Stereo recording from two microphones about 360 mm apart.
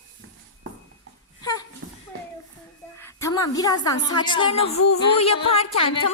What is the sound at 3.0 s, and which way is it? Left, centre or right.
A woman's voice, centre.